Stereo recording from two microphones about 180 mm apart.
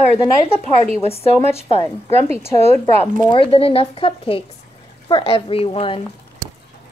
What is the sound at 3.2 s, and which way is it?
Speech, 30° left (ahead or behind).